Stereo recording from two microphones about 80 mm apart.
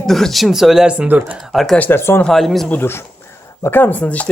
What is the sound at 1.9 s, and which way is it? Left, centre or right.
Speech, left.